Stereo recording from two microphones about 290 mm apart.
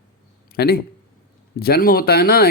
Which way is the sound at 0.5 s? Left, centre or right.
Left.